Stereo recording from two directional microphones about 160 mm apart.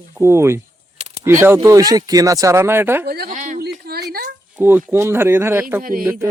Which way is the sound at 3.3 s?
55° right (ahead or behind).